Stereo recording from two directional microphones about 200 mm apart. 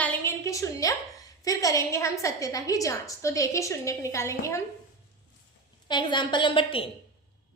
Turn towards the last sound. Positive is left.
turn(degrees=25)  # may be behind; listen again after turning